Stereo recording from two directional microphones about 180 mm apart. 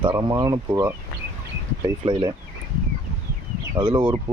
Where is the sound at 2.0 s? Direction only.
30° right (ahead or behind).